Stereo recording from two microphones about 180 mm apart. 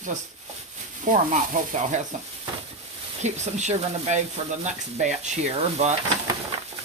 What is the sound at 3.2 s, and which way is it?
Speech, 40° right (ahead or behind).